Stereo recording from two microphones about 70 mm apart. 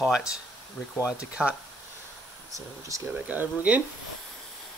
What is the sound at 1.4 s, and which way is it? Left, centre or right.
Speech, centre.